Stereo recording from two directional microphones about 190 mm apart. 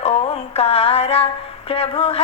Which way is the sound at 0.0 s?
35° left (ahead or behind).